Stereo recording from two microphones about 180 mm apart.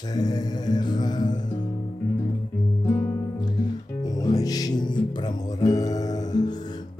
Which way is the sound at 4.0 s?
20° left (ahead or behind).